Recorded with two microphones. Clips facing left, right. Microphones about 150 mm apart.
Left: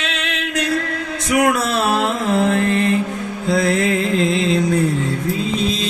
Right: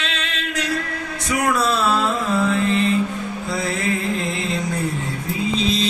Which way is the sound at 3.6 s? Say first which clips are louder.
Left 3 dB; 80° left.